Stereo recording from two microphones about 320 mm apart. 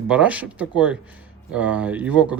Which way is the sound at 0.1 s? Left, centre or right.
Centre.